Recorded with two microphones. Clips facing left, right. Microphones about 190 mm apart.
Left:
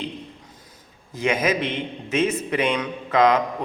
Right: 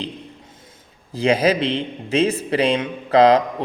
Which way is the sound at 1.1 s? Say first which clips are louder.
Right 5 dB; 35° right (ahead or behind).